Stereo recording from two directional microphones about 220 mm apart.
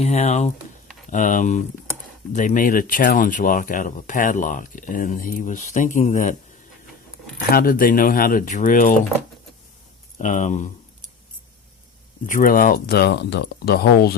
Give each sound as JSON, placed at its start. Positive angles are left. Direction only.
{"t": 0.0, "sound": "speech", "side_deg": 30}
{"t": 7.5, "sound": "speech", "side_deg": 40}
{"t": 10.2, "sound": "speech", "side_deg": 35}
{"t": 12.2, "sound": "speech", "side_deg": 40}